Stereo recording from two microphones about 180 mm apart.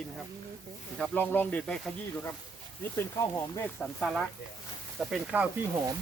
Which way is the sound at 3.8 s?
Centre (ahead or behind).